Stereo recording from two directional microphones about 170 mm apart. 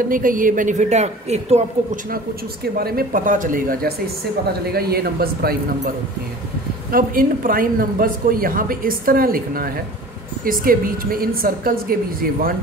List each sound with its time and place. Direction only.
0.1 s a woman's voice: 55° right (ahead or behind)
2.7 s speech: 60° right (ahead or behind)
4.7 s speech: 65° right (ahead or behind)
6.9 s speech: 55° right (ahead or behind)